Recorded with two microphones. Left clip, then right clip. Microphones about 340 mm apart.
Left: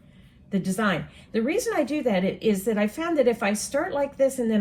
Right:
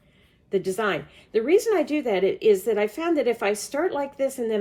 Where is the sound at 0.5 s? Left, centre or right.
Centre.